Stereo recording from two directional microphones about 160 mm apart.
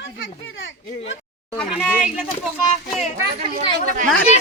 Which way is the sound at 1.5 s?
10° left (ahead or behind).